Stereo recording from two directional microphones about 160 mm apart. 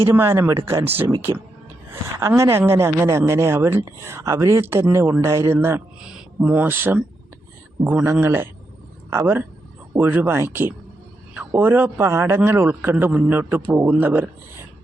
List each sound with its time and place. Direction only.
0.0 s speech: 15° right (ahead or behind)